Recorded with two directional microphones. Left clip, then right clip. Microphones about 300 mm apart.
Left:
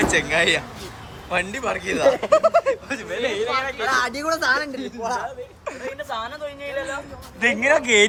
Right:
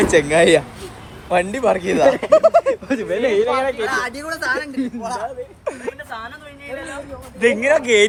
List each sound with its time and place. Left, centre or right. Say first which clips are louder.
0.0 s a man's voice: right 5 dB; centre
2.9 s speech: right 7 dB; centre
3.8 s a woman's voice: left 1 dB; left
5.7 s a sound: right 6 dB; centre
7.3 s speech: right 3 dB; centre